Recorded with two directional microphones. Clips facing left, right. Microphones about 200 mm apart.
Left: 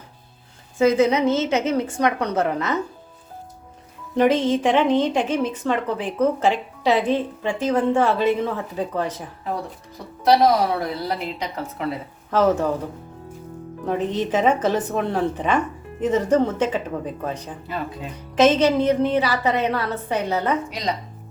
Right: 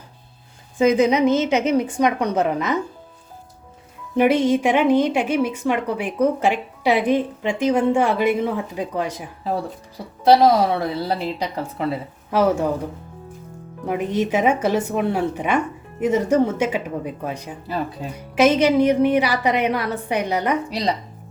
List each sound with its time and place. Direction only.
0.8 s a woman's voice: 15° right (ahead or behind)
4.2 s a woman's voice: 10° right (ahead or behind)
10.2 s a woman's voice: 25° right (ahead or behind)
12.3 s a woman's voice: 10° right (ahead or behind)
13.8 s a woman's voice: 10° right (ahead or behind)
20.7 s speech: 35° right (ahead or behind)